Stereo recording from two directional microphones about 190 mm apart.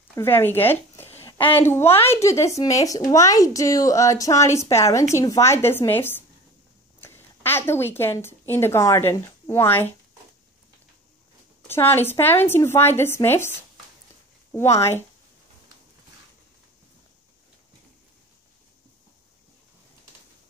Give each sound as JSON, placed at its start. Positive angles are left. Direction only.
{"t": 0.1, "sound": "a woman's voice", "side_deg": 15}
{"t": 11.6, "sound": "a woman's voice", "side_deg": 10}